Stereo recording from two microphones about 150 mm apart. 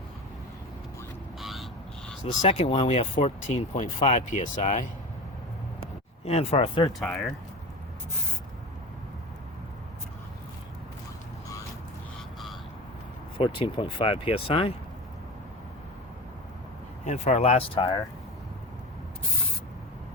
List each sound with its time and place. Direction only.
1.4 s a sound: centre (ahead or behind)
2.4 s speech: 50° left (ahead or behind)
2.6 s speech: 35° left (ahead or behind)
3.4 s speech: 50° left (ahead or behind)
6.2 s speech: 45° left (ahead or behind)
7.0 s speech: centre (ahead or behind)
13.4 s speech: 35° left (ahead or behind)
17.1 s speech: 45° left (ahead or behind)
17.7 s speech: 30° left (ahead or behind)